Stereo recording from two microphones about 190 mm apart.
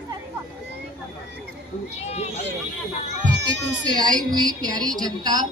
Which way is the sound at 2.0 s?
35° left (ahead or behind).